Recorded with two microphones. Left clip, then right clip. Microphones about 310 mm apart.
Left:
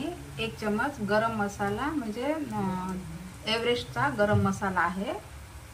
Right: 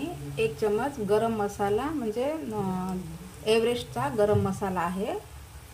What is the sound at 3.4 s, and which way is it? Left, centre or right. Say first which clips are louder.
A woman's voice: right 3 dB; right.